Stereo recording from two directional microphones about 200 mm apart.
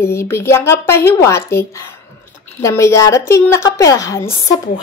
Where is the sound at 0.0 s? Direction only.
15° left (ahead or behind).